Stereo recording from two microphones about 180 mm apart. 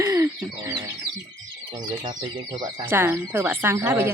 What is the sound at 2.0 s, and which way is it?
Speech, 20° right (ahead or behind).